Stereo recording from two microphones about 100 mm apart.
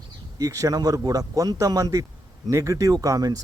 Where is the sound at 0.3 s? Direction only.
35° right (ahead or behind).